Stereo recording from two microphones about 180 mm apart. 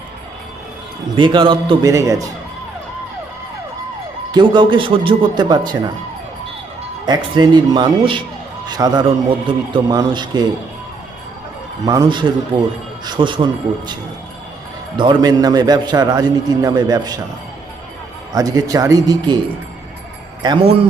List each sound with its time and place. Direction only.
1.1 s a man's voice: 30° right (ahead or behind)
4.3 s a man's voice: 25° right (ahead or behind)
7.0 s a man's voice: 25° right (ahead or behind)
11.9 s a man's voice: 25° right (ahead or behind)
14.9 s a man's voice: 25° right (ahead or behind)
18.3 s a man's voice: 20° right (ahead or behind)